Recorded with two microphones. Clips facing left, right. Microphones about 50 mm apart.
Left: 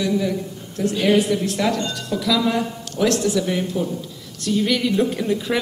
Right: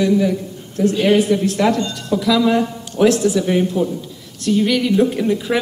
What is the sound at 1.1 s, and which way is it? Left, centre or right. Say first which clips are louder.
A woman's voice: right 4 dB; right.